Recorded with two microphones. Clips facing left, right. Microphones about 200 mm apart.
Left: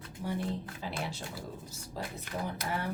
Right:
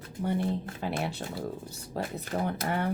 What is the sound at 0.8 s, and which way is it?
Speech, 60° right (ahead or behind).